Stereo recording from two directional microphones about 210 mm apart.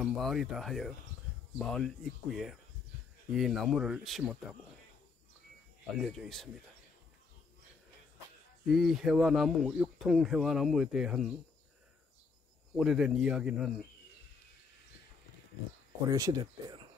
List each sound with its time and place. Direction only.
0.0 s speech: centre (ahead or behind)
5.9 s speech: centre (ahead or behind)
8.6 s speech: centre (ahead or behind)
12.7 s speech: centre (ahead or behind)
16.1 s speech: 15° right (ahead or behind)